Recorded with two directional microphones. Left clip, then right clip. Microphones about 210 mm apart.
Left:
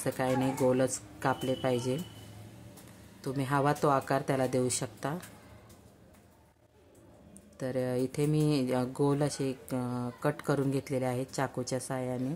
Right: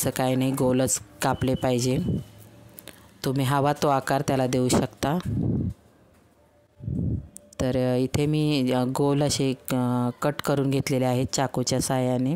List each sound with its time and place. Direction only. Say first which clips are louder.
0.0 s speech: right 5 dB; 50° right (ahead or behind)
3.2 s speech: right 6 dB; 45° right (ahead or behind)
7.5 s speech: right 8 dB; 45° right (ahead or behind)